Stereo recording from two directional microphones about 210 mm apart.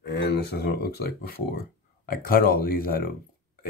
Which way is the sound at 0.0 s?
55° left (ahead or behind).